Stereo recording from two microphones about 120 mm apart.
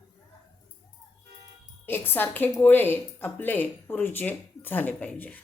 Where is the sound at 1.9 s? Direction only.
15° left (ahead or behind).